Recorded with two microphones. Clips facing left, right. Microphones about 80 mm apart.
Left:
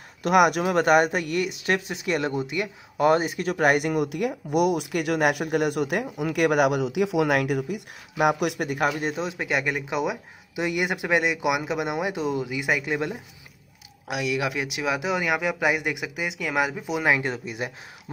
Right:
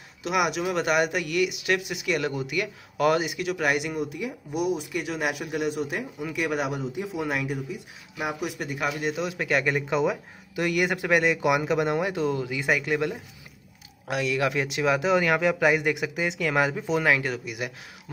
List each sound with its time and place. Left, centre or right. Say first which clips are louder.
0.2 s speech: left 6 dB; left
9.1 s speech: right 1 dB; left
9.7 s speech: right 2 dB; centre
17.0 s speech: left 4 dB; left